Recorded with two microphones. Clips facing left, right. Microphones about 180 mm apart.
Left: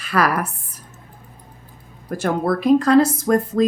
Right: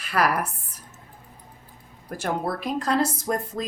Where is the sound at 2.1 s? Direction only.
90° left.